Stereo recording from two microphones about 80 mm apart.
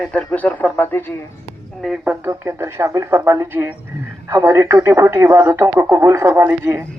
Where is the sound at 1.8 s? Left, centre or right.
Centre.